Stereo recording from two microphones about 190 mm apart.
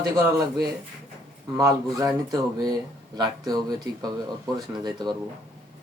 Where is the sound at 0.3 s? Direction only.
20° right (ahead or behind).